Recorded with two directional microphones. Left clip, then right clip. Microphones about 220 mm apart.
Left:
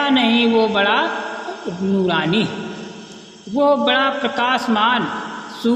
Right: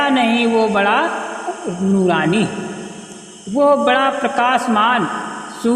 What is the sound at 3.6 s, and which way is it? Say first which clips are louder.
A man's voice: right 2 dB; 40° right (ahead or behind).